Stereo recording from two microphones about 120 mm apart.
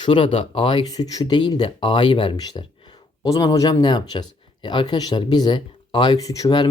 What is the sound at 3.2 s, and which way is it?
Speech, 30° left (ahead or behind).